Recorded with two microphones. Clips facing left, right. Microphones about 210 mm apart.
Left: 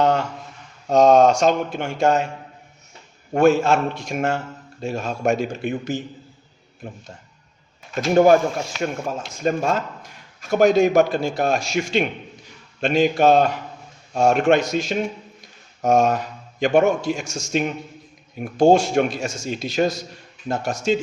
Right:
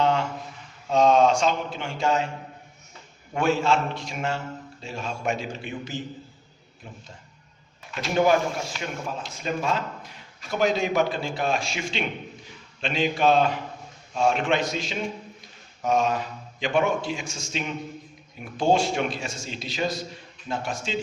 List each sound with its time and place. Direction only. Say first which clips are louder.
0.9 s a man's voice: left 5 dB; 45° left (ahead or behind)
3.3 s a man's voice: left 7 dB; 45° left (ahead or behind)